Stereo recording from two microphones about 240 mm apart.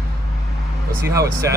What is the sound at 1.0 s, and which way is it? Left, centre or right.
Speech, centre.